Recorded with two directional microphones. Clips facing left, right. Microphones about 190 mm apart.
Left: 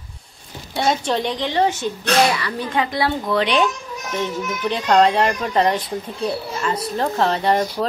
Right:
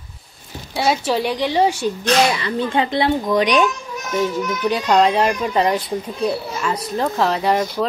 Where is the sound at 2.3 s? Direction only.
25° right (ahead or behind).